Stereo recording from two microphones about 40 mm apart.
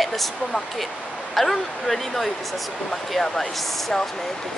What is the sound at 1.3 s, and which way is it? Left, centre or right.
Speech, centre.